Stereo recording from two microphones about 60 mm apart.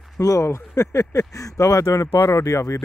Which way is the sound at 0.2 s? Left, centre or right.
Left.